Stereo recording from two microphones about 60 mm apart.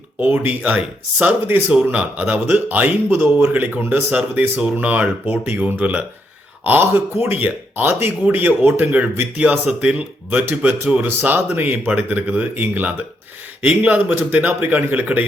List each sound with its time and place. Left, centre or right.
0.2 s speech: right
4.1 s speech: right
6.7 s speech: right